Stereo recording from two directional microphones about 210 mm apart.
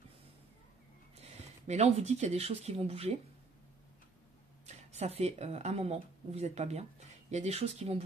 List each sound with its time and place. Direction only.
1.1 s speech: 30° right (ahead or behind)
4.6 s speech: 30° right (ahead or behind)